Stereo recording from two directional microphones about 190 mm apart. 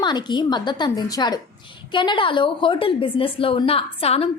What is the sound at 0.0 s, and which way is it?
A woman's voice, 20° left (ahead or behind).